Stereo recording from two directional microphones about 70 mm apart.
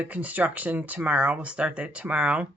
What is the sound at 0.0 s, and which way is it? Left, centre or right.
Speech, right.